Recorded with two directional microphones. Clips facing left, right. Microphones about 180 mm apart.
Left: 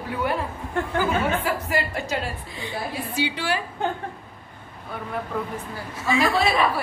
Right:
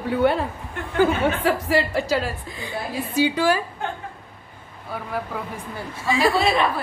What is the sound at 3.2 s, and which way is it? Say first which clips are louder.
Speech: right 7 dB; 40° right (ahead or behind).